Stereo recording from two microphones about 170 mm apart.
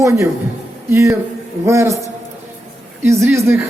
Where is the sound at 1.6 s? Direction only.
15° right (ahead or behind).